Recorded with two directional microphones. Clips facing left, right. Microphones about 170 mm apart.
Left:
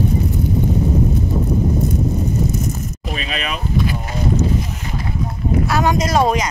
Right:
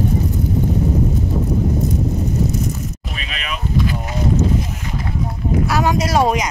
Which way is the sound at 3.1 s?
35° left (ahead or behind).